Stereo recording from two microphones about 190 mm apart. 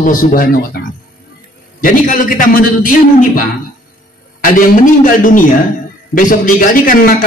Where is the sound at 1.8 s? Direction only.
45° left (ahead or behind).